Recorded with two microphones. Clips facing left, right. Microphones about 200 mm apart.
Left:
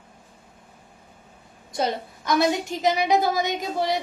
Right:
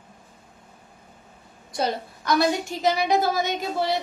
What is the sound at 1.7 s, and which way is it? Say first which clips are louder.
A woman's voice: even; 25° left (ahead or behind).